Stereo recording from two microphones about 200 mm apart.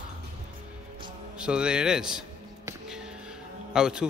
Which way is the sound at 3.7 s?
5° right (ahead or behind).